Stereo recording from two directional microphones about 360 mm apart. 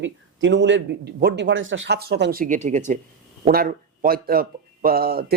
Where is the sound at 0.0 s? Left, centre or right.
Right.